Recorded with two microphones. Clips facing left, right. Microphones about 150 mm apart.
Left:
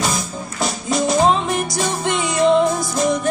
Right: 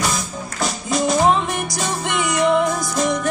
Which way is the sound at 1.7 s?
25° left (ahead or behind).